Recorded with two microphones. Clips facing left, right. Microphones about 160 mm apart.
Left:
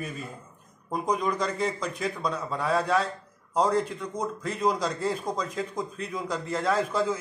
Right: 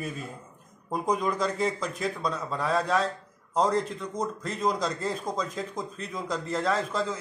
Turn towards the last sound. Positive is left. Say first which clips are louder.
# left 2 dB
turn(degrees=5)  # may be behind; listen again after turning